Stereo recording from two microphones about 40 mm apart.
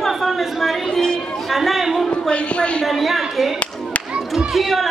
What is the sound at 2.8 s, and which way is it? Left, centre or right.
Speech, centre.